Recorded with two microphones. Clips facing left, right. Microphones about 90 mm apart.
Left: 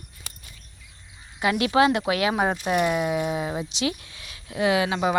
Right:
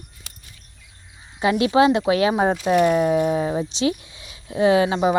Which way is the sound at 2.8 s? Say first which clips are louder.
Right 7 dB; 40° right (ahead or behind).